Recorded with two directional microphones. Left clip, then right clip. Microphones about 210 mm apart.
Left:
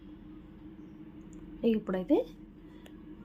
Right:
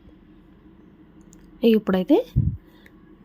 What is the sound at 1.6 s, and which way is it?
Speech, 40° right (ahead or behind).